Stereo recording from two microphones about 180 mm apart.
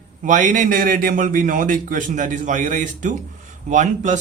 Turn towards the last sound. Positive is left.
turn(degrees=-45)  # may be behind; listen again after turning